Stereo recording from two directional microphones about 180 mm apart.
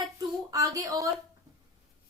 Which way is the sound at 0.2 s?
20° right (ahead or behind).